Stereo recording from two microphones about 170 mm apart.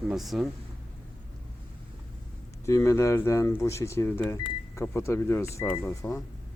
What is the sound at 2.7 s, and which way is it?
Speech, 15° left (ahead or behind).